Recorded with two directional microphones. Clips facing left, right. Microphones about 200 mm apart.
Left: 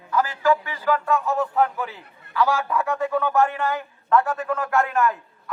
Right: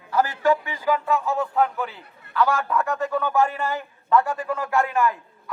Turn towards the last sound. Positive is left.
turn(degrees=0)  # may be behind; listen again after turning